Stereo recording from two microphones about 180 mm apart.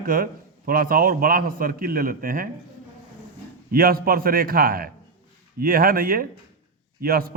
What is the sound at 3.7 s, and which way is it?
A man's voice, 55° right (ahead or behind).